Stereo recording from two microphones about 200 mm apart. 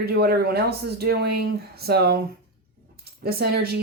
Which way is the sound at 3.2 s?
50° right (ahead or behind).